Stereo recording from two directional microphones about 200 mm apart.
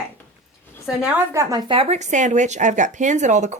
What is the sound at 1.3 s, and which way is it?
Speech, 15° right (ahead or behind).